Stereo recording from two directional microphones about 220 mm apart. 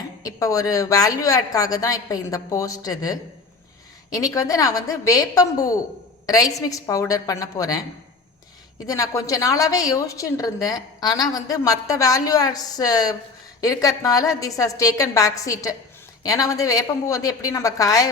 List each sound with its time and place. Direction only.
0.2 s a woman's voice: 15° left (ahead or behind)
8.9 s a woman's voice: 15° left (ahead or behind)